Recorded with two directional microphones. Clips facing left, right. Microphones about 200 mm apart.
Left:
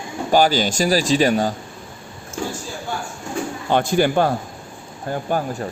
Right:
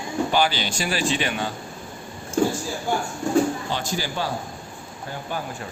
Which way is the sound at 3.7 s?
55° left (ahead or behind).